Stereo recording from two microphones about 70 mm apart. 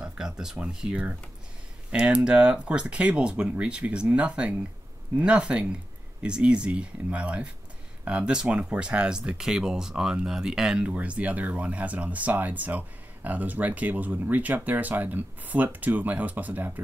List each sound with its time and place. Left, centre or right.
0.0 s speech: centre; by 16.8 s right